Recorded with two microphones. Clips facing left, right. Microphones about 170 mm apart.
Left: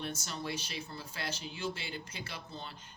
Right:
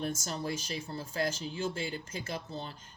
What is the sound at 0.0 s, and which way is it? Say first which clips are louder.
Speech: right 4 dB; 40° right (ahead or behind).